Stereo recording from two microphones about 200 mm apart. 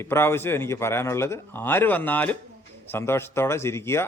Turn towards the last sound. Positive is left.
turn(degrees=15)  # may be behind; listen again after turning